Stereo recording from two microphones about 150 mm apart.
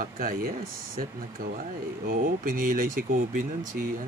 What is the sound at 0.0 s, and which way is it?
Speech, 70° right (ahead or behind).